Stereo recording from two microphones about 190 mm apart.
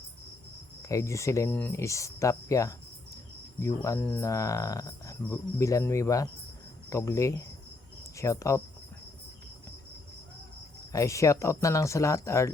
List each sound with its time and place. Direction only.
0.8 s speech: 15° left (ahead or behind)
10.9 s speech: 15° left (ahead or behind)